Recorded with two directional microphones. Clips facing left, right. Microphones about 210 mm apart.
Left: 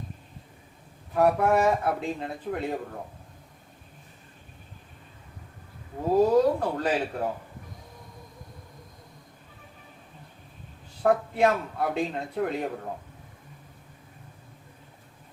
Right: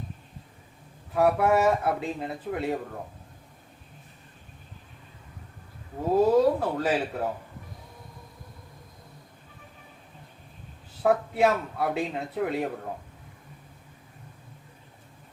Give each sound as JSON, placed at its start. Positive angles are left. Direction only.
{"t": 1.1, "sound": "a man's voice", "side_deg": -5}
{"t": 6.1, "sound": "a man's voice", "side_deg": -5}
{"t": 11.0, "sound": "a man's voice", "side_deg": -5}